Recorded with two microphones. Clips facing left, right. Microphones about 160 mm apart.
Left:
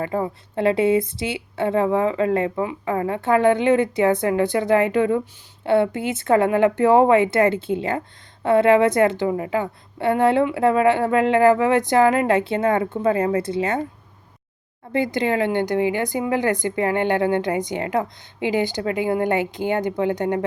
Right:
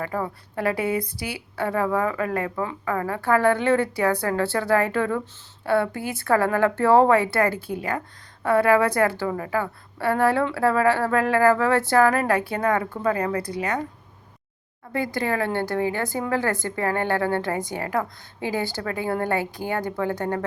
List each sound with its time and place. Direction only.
0.0 s a woman's voice: 25° left (ahead or behind)
14.9 s a woman's voice: 20° left (ahead or behind)